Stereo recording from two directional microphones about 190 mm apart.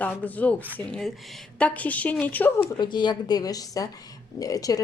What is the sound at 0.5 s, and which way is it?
Speech, 10° right (ahead or behind).